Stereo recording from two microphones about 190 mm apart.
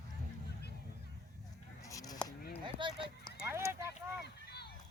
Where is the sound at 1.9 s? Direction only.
15° left (ahead or behind).